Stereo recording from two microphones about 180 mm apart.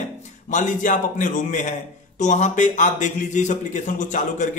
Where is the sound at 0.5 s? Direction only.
45° left (ahead or behind).